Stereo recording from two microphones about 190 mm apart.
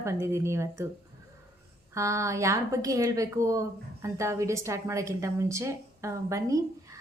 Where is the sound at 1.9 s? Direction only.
15° right (ahead or behind).